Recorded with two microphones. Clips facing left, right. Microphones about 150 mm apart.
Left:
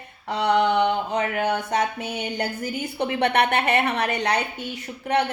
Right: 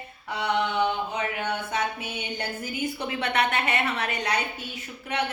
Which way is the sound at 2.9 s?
60° left (ahead or behind).